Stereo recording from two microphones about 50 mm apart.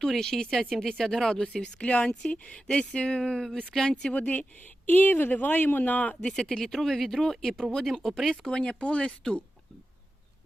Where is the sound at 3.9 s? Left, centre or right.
Left.